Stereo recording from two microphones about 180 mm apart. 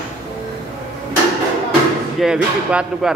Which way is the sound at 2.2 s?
5° right (ahead or behind).